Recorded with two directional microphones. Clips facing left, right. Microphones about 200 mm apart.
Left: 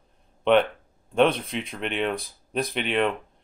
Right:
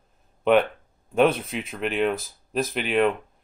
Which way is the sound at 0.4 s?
5° right (ahead or behind).